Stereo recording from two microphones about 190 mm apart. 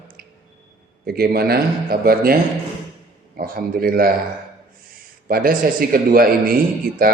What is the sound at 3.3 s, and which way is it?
Speech, 50° right (ahead or behind).